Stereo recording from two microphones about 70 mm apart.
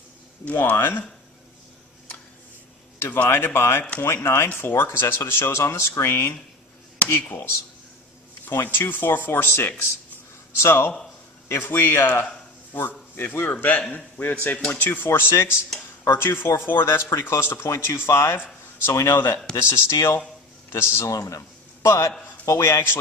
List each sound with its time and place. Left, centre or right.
0.4 s a man's voice: left
3.0 s a man's voice: left
19.1 s a man's voice: left